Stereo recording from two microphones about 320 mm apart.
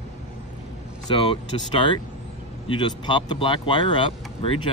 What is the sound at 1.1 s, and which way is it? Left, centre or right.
Speech, centre.